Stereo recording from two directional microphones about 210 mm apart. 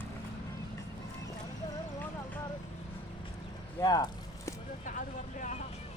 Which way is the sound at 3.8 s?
20° left (ahead or behind).